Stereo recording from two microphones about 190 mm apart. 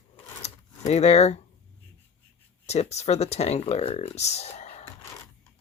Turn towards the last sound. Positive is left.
turn(degrees=35)  # may be behind; listen again after turning